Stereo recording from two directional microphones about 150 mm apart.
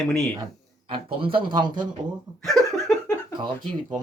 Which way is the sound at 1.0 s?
35° right (ahead or behind).